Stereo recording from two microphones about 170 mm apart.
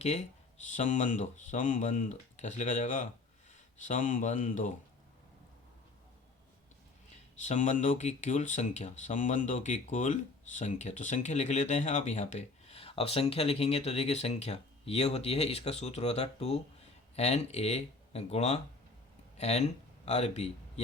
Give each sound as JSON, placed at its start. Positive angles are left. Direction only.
{"t": 0.0, "sound": "speech", "side_deg": 40}
{"t": 7.4, "sound": "a man's voice", "side_deg": 45}